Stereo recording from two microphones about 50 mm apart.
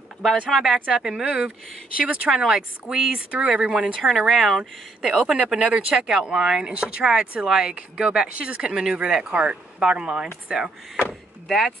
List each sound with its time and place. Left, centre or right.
0.5 s speech: centre
2.0 s speech: right
2.3 s speech: centre
3.2 s speech: right
4.3 s speech: centre
5.0 s speech: centre
5.9 s speech: centre
8.4 s speech: right
11.4 s speech: centre